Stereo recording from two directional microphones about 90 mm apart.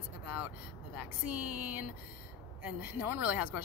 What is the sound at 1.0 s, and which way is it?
Speech, 15° right (ahead or behind).